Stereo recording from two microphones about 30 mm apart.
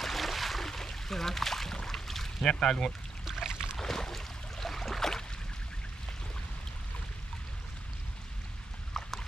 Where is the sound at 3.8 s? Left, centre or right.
Centre.